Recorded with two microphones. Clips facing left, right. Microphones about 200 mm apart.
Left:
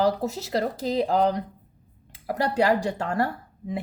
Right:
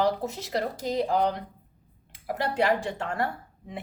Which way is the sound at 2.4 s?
40° left (ahead or behind).